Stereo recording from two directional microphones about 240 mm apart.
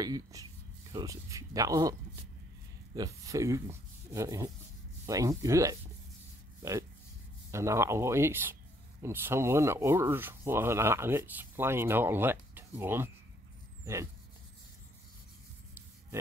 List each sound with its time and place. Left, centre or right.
0.0 s speech: centre
7.5 s speech: centre